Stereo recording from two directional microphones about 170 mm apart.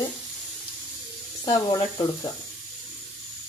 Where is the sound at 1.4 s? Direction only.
25° left (ahead or behind).